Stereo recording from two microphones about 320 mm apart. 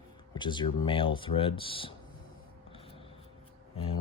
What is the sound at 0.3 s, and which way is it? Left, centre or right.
Speech, centre.